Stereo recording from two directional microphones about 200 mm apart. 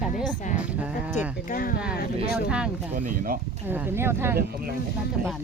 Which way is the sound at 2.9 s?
40° right (ahead or behind).